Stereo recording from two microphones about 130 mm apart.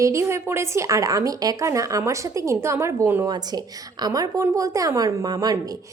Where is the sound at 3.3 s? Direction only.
30° right (ahead or behind).